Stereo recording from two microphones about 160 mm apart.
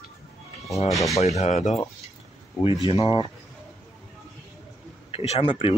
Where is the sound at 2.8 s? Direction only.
30° left (ahead or behind).